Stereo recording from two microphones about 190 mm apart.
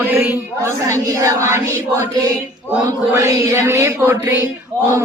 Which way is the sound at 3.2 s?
15° right (ahead or behind).